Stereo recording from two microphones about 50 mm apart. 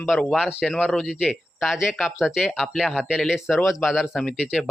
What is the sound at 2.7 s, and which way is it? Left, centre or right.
A man's voice, centre.